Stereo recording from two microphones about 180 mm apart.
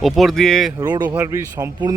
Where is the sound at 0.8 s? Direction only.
25° right (ahead or behind).